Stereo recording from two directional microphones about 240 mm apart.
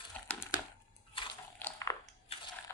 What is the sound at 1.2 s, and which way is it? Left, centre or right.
Bathtub, left.